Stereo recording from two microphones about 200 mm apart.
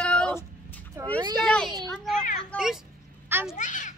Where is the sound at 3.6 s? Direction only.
40° left (ahead or behind).